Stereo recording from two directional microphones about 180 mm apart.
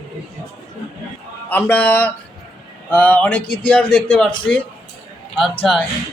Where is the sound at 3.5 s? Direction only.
5° left (ahead or behind).